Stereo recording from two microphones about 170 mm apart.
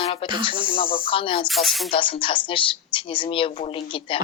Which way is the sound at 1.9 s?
30° left (ahead or behind).